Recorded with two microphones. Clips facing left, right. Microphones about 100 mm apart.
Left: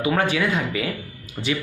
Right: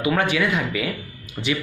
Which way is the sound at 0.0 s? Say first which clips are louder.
Even; 35° left (ahead or behind).